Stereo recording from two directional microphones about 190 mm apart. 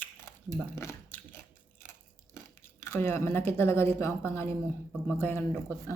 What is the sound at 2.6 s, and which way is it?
Speech, 15° left (ahead or behind).